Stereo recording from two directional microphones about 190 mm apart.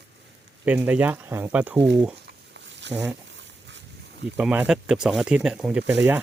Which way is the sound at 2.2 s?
65° right (ahead or behind).